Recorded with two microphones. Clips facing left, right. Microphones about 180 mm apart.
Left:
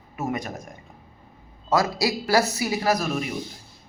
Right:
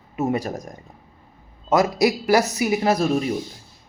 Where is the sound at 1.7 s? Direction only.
20° right (ahead or behind).